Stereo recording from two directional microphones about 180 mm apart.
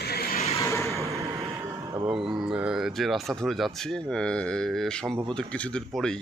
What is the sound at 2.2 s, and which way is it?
Speech, 5° right (ahead or behind).